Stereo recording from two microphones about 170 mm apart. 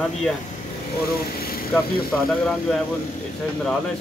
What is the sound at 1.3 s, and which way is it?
Speech, 60° left (ahead or behind).